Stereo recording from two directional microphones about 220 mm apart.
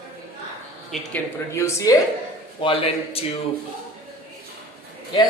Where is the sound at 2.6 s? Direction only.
25° left (ahead or behind).